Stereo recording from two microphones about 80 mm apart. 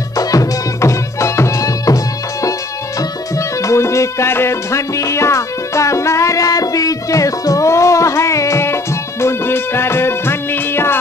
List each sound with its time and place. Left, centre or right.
0.1 s music: left
3.0 s music: left